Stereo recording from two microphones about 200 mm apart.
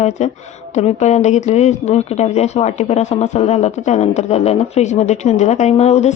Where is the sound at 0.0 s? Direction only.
35° left (ahead or behind).